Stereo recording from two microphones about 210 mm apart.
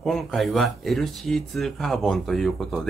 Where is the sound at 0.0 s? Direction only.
Centre (ahead or behind).